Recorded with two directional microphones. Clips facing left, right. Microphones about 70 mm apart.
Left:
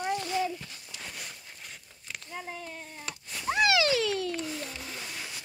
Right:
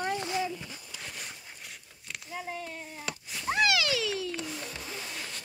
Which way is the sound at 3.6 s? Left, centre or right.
Left.